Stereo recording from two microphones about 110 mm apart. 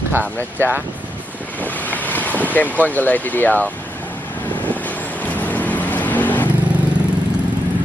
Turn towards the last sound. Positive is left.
turn(degrees=15)  # may be behind; listen again after turning